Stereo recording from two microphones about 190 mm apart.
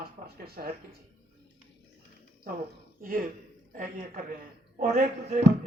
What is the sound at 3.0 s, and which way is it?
A man's voice, 50° right (ahead or behind).